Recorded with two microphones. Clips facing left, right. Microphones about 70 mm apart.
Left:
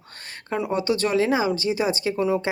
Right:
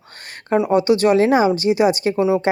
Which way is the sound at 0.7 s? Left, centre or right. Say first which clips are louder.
Right 7 dB; right.